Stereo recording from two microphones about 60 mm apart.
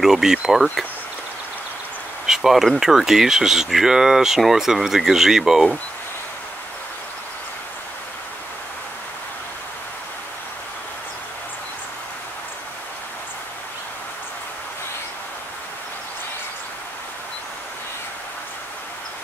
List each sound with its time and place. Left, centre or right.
0.0 s speech: centre
2.2 s speech: centre